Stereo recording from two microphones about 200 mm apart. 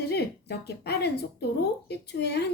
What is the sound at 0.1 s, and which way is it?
Speech, 55° left (ahead or behind).